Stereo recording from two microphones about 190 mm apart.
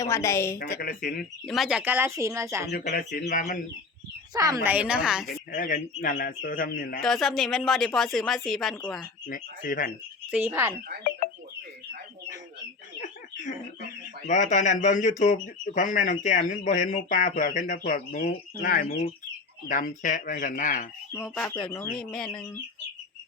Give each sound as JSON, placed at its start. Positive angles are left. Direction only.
{"t": 0.0, "sound": "a woman's voice", "side_deg": 15}
{"t": 0.8, "sound": "speech", "side_deg": 50}
{"t": 1.5, "sound": "speech", "side_deg": 0}
{"t": 2.6, "sound": "speech", "side_deg": 55}
{"t": 4.4, "sound": "speech", "side_deg": -15}
{"t": 5.2, "sound": "speech", "side_deg": 50}
{"t": 7.0, "sound": "speech", "side_deg": 0}
{"t": 9.2, "sound": "speech", "side_deg": 45}
{"t": 10.3, "sound": "speech", "side_deg": -10}
{"t": 13.0, "sound": "a sound", "side_deg": 40}
{"t": 14.3, "sound": "speech", "side_deg": 40}
{"t": 21.2, "sound": "a woman's voice", "side_deg": 5}
{"t": 21.9, "sound": "speech", "side_deg": 5}